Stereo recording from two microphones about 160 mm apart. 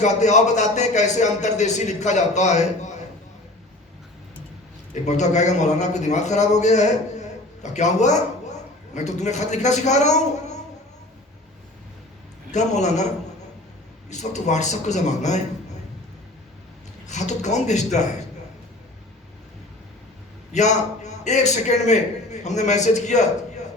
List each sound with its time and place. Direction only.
0.0 s a man's voice: 45° left (ahead or behind)
5.0 s a man's voice: 45° left (ahead or behind)
12.5 s a man's voice: 45° left (ahead or behind)
14.1 s a man's voice: 45° left (ahead or behind)
17.1 s a man's voice: 45° left (ahead or behind)
20.5 s a man's voice: 45° left (ahead or behind)